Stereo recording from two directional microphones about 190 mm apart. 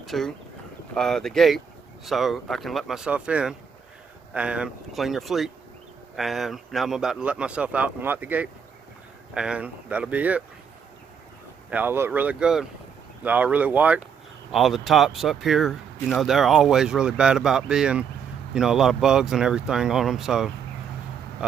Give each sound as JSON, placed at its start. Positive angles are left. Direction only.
{"t": 0.0, "sound": "speech", "side_deg": 0}
{"t": 11.7, "sound": "speech", "side_deg": -10}